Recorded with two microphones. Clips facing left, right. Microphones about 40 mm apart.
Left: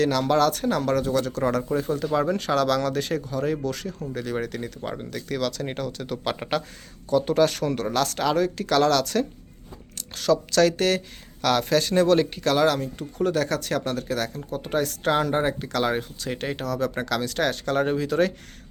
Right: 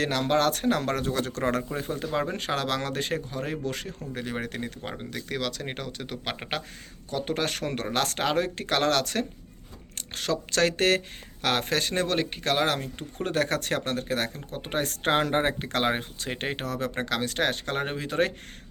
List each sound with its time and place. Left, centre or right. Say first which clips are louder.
0.0 s speech: left 4 dB; right
1.7 s speech: left 6 dB; right